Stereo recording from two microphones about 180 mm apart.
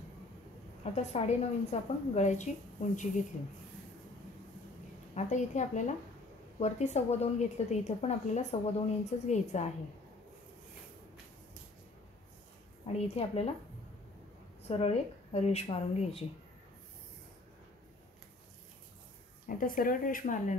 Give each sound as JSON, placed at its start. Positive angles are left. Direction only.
{"t": 0.9, "sound": "a woman's voice", "side_deg": 40}
{"t": 5.1, "sound": "a woman's voice", "side_deg": 40}
{"t": 12.8, "sound": "a woman's voice", "side_deg": 35}
{"t": 14.7, "sound": "a woman's voice", "side_deg": 35}
{"t": 19.4, "sound": "speech", "side_deg": 50}